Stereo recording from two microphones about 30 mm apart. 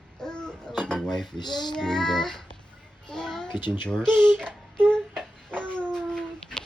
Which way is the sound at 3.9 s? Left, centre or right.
Left.